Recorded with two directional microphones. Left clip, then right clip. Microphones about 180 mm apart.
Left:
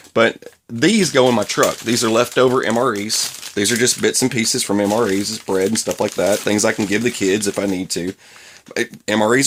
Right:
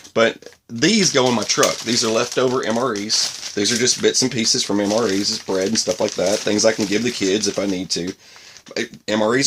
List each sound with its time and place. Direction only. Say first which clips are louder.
0.1 s speech: left 2 dB; 40° left (ahead or behind)